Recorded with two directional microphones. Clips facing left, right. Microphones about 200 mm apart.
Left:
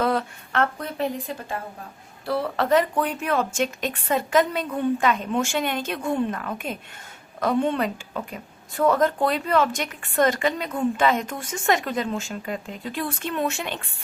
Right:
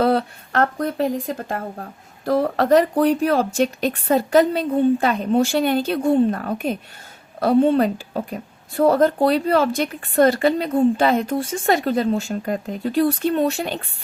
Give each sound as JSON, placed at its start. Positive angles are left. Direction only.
{"t": 0.0, "sound": "a woman's voice", "side_deg": -35}